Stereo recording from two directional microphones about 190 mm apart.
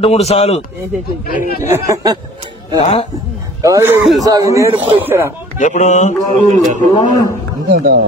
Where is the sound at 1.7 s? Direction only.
15° right (ahead or behind).